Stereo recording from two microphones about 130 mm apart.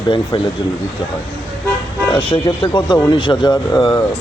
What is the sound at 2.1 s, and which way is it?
Speech, 40° left (ahead or behind).